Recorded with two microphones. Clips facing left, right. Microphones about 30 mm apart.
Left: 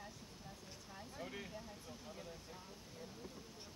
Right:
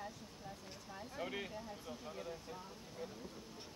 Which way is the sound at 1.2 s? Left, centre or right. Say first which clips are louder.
Right 6 dB; right.